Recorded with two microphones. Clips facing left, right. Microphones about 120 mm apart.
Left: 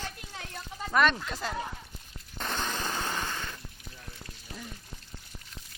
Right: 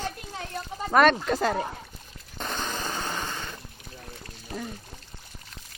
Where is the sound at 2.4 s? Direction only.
10° right (ahead or behind).